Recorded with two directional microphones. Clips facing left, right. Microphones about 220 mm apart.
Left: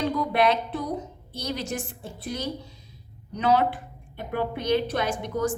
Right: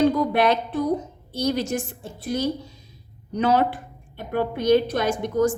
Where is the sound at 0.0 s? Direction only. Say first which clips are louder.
Right 4 dB; 45° right (ahead or behind).